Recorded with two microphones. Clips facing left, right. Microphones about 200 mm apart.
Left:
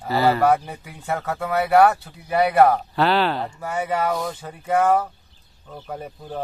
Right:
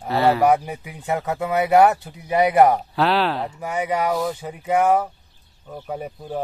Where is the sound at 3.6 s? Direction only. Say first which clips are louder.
Right 1 dB; 15° right (ahead or behind).